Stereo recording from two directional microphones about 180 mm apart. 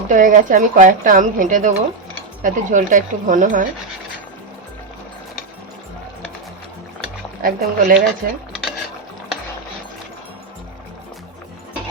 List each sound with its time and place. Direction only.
0.1 s speech: 45° right (ahead or behind)
7.4 s speech: 50° right (ahead or behind)